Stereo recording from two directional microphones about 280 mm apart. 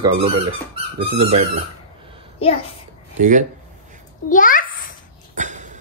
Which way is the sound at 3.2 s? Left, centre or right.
Right.